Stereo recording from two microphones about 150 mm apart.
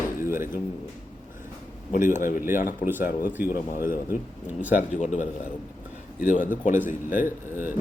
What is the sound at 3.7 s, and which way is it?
Speech, 65° left (ahead or behind).